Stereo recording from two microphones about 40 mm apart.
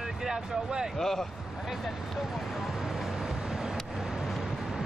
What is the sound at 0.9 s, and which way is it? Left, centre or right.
Speech, centre.